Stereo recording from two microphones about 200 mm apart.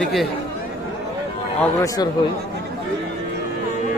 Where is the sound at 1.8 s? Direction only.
20° left (ahead or behind).